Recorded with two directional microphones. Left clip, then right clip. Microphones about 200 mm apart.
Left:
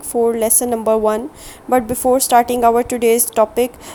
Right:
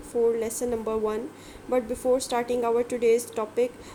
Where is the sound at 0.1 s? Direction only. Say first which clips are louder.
Left 9 dB; 45° left (ahead or behind).